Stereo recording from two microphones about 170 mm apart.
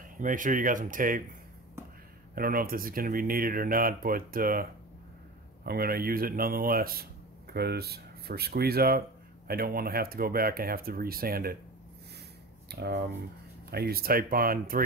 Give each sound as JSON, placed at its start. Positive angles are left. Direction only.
{"t": 0.2, "sound": "speech", "side_deg": -50}
{"t": 2.3, "sound": "speech", "side_deg": -60}
{"t": 12.7, "sound": "speech", "side_deg": -70}